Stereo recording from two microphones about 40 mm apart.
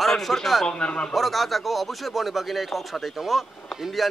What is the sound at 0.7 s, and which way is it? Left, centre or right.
Speech, left.